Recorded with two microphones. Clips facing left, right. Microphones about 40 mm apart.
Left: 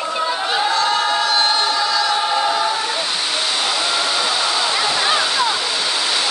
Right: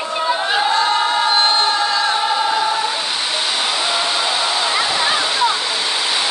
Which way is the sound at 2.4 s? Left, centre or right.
Centre.